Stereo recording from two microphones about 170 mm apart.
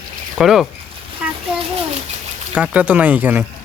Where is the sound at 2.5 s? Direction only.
5° right (ahead or behind).